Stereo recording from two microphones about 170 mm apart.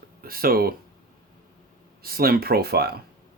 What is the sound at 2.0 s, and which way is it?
Speech, 60° right (ahead or behind).